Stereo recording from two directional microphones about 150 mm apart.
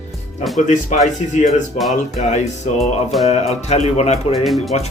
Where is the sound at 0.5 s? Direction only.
55° left (ahead or behind).